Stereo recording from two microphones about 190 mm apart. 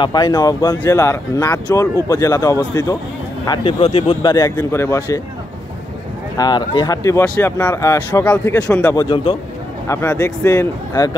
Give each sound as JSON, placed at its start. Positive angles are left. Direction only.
{"t": 0.0, "sound": "speech", "side_deg": 20}
{"t": 6.3, "sound": "speech", "side_deg": 20}
{"t": 8.9, "sound": "speech", "side_deg": 30}
{"t": 9.8, "sound": "speech", "side_deg": 15}